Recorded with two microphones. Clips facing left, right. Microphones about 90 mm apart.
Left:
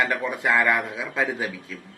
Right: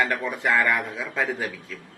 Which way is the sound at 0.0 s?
5° left (ahead or behind).